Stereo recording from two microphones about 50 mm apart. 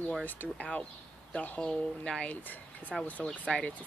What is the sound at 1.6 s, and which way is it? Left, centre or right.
Speech, centre.